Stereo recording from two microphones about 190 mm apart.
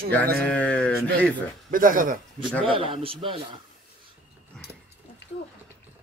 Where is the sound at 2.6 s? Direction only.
30° right (ahead or behind).